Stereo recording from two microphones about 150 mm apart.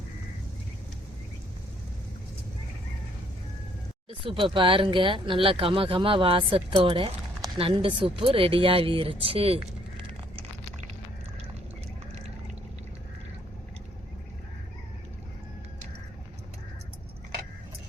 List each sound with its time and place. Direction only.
4.1 s speech: 35° right (ahead or behind)